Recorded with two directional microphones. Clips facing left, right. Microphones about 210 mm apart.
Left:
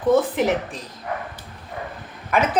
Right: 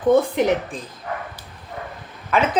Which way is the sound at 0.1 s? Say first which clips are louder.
Right 2 dB; centre (ahead or behind).